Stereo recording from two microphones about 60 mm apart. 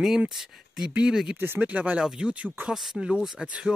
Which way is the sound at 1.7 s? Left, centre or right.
Right.